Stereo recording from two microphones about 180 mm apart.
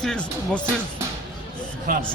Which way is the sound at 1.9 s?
50° right (ahead or behind).